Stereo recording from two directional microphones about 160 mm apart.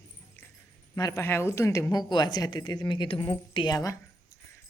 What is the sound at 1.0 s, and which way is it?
A woman's voice, 20° left (ahead or behind).